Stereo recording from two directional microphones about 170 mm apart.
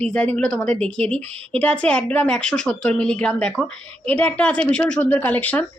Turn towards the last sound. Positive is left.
turn(degrees=10)  # may be behind; listen again after turning